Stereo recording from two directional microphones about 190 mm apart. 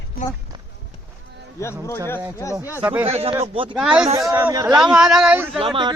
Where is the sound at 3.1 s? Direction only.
30° right (ahead or behind).